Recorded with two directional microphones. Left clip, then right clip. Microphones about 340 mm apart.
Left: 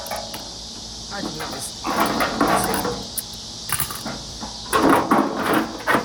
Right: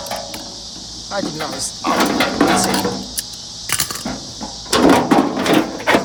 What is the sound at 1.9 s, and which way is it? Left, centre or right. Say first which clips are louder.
Music: right 3 dB; right.